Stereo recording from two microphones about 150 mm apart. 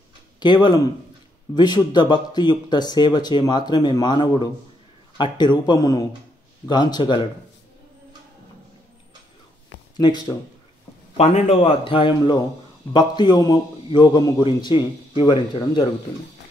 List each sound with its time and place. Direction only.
0.4 s speech: 30° left (ahead or behind)
9.9 s speech: 30° left (ahead or behind)
11.1 s a man's voice: 45° left (ahead or behind)